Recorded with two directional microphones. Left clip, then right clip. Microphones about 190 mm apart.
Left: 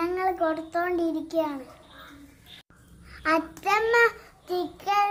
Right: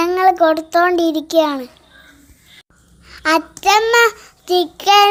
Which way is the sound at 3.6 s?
35° right (ahead or behind).